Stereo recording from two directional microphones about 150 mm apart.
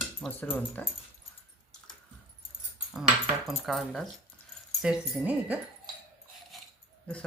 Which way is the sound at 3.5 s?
Centre (ahead or behind).